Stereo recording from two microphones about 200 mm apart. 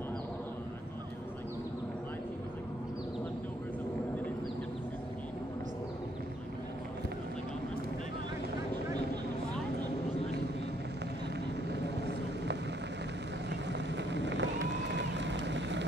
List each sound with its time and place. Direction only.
11.8 s vehicle: 60° right (ahead or behind)
13.5 s run: 60° right (ahead or behind)